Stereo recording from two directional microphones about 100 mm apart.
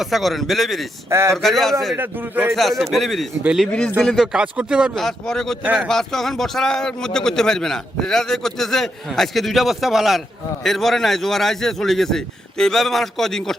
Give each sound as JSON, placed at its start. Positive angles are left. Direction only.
{"t": 0.0, "sound": "a man's voice", "side_deg": 0}
{"t": 1.1, "sound": "a man's voice", "side_deg": -25}
{"t": 1.4, "sound": "a man's voice", "side_deg": 0}
{"t": 2.0, "sound": "a man's voice", "side_deg": -20}
{"t": 2.6, "sound": "a man's voice", "side_deg": 0}
{"t": 3.7, "sound": "speech", "side_deg": 10}
{"t": 4.9, "sound": "a man's voice", "side_deg": 5}